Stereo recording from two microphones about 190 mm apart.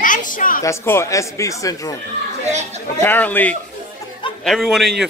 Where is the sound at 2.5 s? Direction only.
35° right (ahead or behind).